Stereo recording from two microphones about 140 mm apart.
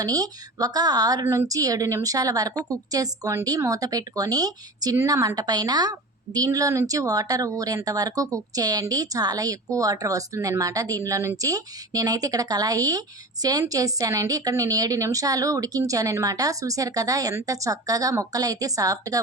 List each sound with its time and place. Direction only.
0.0 s a woman's voice: 25° right (ahead or behind)